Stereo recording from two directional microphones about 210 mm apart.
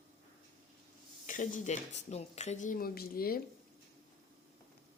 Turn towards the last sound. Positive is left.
turn(degrees=45)  # may be behind; listen again after turning